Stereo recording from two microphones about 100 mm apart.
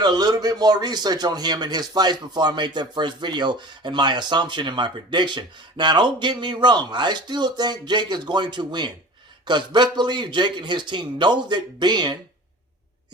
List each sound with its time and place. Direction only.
0.0 s speech: 45° right (ahead or behind)